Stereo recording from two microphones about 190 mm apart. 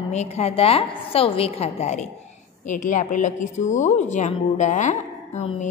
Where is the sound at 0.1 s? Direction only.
35° left (ahead or behind).